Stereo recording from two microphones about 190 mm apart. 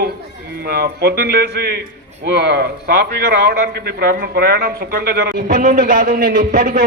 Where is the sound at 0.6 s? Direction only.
55° right (ahead or behind).